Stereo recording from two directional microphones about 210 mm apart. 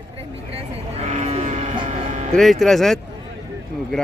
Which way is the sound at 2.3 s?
Centre (ahead or behind).